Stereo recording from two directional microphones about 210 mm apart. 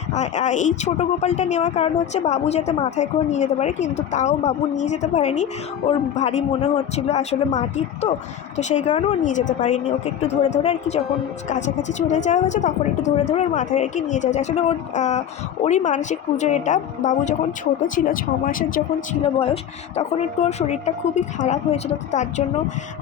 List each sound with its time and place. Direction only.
0.1 s a woman's voice: 35° left (ahead or behind)
19.2 s a woman's voice: 25° left (ahead or behind)